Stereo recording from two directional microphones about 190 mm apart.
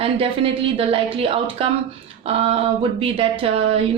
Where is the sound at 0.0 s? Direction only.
30° right (ahead or behind).